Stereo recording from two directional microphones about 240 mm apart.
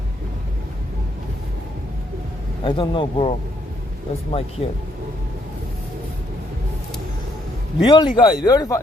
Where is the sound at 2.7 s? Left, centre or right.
Centre.